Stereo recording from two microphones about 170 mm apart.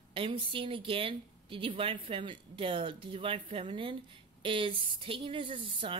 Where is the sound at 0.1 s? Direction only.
30° right (ahead or behind).